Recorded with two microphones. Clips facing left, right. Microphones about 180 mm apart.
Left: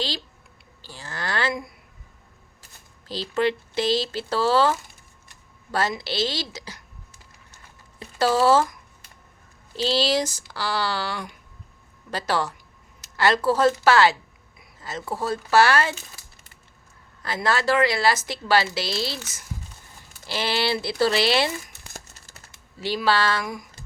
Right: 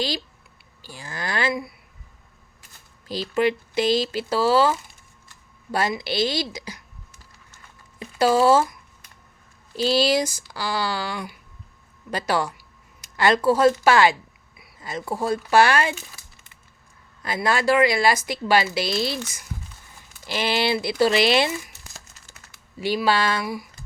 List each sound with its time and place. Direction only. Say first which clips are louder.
0.8 s speech: right 1 dB; 10° right (ahead or behind)
3.1 s speech: right 2 dB; 10° right (ahead or behind)
7.9 s speech: right 2 dB; 15° right (ahead or behind)
9.7 s speech: right 2 dB; 10° right (ahead or behind)
17.2 s speech: right 2 dB; 15° right (ahead or behind)
21.9 s music: left 4 dB; 40° left (ahead or behind)
22.8 s speech: right 1 dB; 15° right (ahead or behind)